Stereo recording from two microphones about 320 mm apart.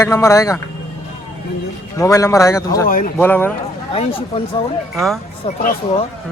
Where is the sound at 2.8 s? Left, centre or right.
Left.